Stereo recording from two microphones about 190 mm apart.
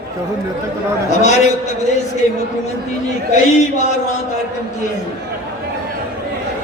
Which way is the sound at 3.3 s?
40° left (ahead or behind).